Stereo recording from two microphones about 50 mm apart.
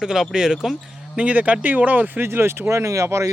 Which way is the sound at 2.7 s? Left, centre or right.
Right.